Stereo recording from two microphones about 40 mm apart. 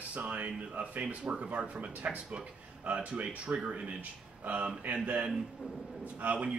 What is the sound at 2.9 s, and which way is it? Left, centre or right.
Speech, right.